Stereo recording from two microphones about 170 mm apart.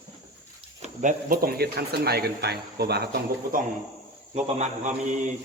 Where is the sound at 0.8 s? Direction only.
45° right (ahead or behind); by 3.6 s 65° right (ahead or behind).